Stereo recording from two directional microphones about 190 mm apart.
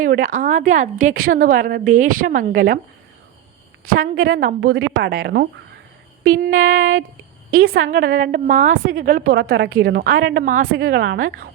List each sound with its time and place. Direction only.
0.0 s a woman's voice: 45° right (ahead or behind)
3.9 s a woman's voice: 50° right (ahead or behind)
6.4 s a woman's voice: 45° right (ahead or behind)
7.5 s a woman's voice: 90° right
7.9 s a woman's voice: 50° right (ahead or behind)